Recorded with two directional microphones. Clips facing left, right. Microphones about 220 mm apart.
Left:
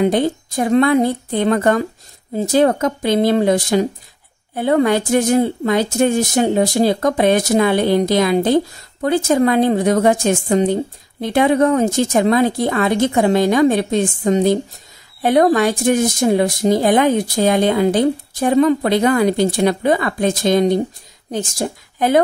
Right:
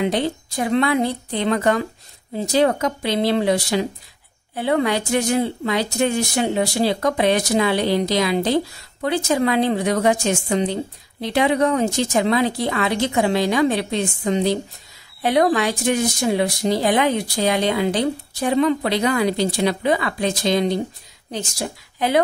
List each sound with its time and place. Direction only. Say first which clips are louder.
0.0 s a woman's voice: left 5 dB; 50° left (ahead or behind)